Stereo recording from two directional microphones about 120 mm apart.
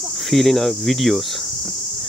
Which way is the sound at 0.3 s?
Centre (ahead or behind).